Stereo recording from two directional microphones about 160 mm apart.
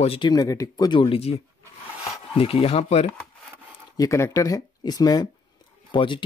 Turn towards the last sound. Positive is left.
turn(degrees=30)  # may be behind; listen again after turning